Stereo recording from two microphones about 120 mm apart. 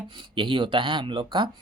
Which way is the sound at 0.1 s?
40° right (ahead or behind).